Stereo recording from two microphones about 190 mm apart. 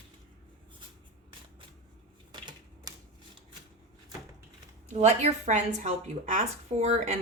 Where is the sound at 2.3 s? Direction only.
20° right (ahead or behind).